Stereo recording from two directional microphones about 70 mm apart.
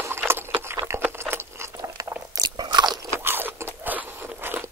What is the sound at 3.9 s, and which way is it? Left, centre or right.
Biting, right.